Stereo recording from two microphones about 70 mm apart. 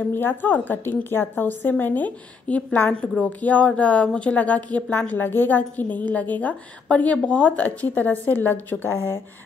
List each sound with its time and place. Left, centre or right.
0.1 s a woman's voice: left